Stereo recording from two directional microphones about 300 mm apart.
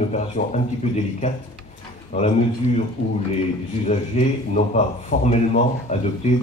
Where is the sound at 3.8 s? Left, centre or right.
Left.